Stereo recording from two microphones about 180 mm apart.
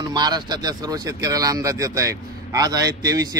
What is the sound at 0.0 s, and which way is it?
Speech, 25° right (ahead or behind).